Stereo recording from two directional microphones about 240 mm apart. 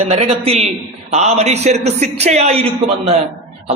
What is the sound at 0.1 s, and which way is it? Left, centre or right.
A man's voice, right.